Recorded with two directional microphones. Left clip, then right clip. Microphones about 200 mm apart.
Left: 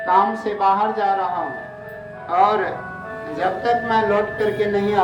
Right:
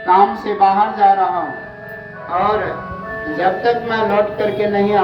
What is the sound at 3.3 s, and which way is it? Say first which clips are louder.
Speech: right 4 dB; 70° left (ahead or behind).